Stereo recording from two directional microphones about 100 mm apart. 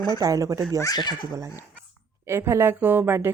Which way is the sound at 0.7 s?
40° left (ahead or behind).